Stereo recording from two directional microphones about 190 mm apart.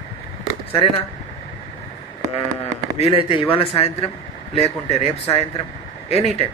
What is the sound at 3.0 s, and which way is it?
A man's voice, 30° left (ahead or behind).